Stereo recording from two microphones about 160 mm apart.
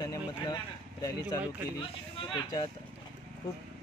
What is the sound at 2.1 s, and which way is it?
Speech, 30° left (ahead or behind).